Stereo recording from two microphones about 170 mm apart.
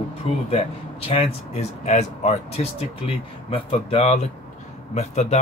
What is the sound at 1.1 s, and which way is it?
Speech, 35° left (ahead or behind).